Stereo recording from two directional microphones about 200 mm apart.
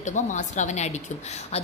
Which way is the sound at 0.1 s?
35° left (ahead or behind).